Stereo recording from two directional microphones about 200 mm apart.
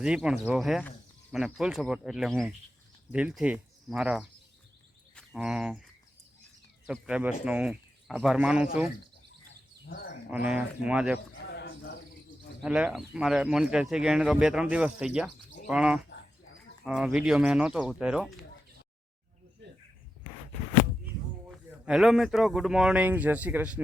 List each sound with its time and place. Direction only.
0.0 s speech: 5° right (ahead or behind)
6.8 s speech: 5° right (ahead or behind)
9.9 s speech: 50° left (ahead or behind)
10.3 s speech: 5° right (ahead or behind)
11.5 s cricket: 55° left (ahead or behind)
12.6 s speech: 5° right (ahead or behind)
21.8 s speech: centre (ahead or behind)